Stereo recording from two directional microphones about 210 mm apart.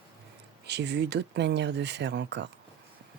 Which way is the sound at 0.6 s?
55° right (ahead or behind).